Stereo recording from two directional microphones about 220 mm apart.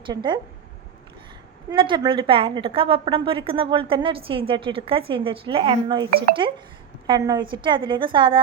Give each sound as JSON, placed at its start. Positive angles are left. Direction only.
{"t": 0.0, "sound": "a woman's voice", "side_deg": -20}
{"t": 1.7, "sound": "a woman's voice", "side_deg": -20}